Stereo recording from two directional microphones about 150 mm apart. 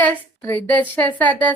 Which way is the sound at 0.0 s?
10° left (ahead or behind).